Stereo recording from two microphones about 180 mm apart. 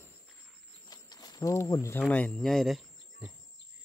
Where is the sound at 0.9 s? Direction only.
20° left (ahead or behind).